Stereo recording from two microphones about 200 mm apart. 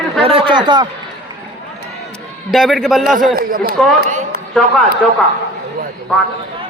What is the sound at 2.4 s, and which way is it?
Speech, centre (ahead or behind).